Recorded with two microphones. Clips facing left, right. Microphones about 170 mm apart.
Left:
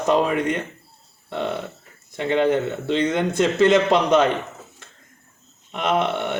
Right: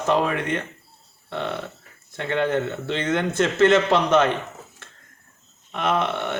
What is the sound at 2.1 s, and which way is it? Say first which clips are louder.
A man's voice: left 3 dB; 15° left (ahead or behind).